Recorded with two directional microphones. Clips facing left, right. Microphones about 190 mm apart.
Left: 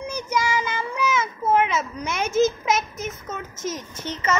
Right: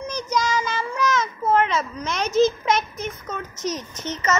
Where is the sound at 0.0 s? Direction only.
10° left (ahead or behind).